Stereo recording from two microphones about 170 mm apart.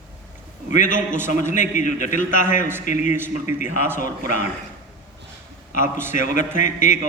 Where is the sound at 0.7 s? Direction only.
50° left (ahead or behind).